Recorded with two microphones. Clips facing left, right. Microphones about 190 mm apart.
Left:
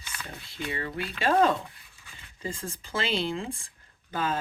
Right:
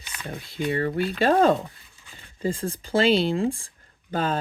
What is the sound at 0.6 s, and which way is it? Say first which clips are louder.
Speech: right 9 dB; 45° right (ahead or behind).